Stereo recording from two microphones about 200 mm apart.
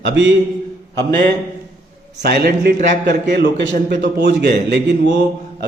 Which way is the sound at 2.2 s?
50° right (ahead or behind).